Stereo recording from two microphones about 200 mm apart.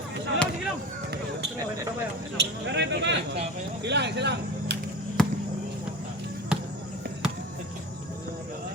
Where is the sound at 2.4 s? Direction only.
60° right (ahead or behind).